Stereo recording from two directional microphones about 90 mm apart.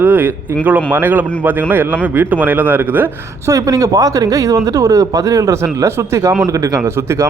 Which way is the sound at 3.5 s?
40° right (ahead or behind).